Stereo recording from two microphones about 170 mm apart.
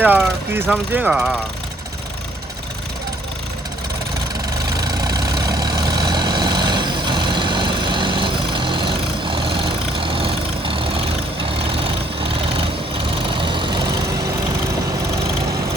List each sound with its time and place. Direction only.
0.0 s speech: 10° right (ahead or behind)
4.8 s vehicle: 25° right (ahead or behind)
13.3 s vehicle: 30° right (ahead or behind)